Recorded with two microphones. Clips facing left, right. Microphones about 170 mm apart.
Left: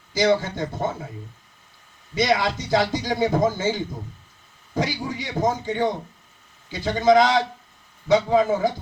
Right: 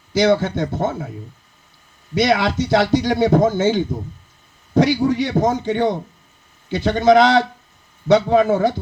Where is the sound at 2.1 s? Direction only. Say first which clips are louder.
Right 5 dB; 65° right (ahead or behind).